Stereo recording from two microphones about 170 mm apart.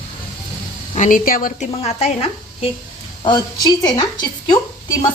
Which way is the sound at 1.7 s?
35° left (ahead or behind).